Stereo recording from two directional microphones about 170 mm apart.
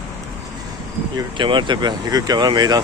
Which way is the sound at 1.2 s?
30° right (ahead or behind).